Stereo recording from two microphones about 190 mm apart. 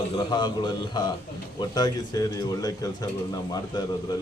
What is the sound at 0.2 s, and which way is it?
Speech, 20° left (ahead or behind).